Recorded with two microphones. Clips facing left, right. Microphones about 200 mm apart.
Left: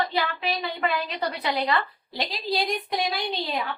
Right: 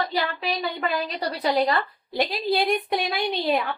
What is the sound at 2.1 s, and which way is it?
A woman's voice, 55° right (ahead or behind).